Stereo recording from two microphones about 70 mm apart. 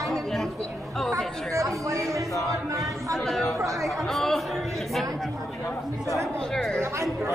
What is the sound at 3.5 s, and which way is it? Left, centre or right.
Chatter, right.